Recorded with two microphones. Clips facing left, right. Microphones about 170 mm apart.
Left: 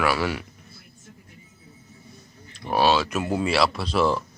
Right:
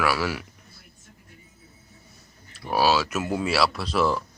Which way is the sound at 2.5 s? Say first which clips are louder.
Left 1 dB; 5° right (ahead or behind).